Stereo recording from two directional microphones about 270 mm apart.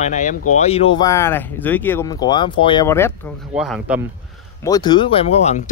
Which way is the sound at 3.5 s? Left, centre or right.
Centre.